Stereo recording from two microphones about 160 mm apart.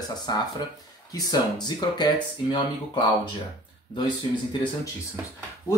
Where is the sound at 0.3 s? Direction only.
25° left (ahead or behind).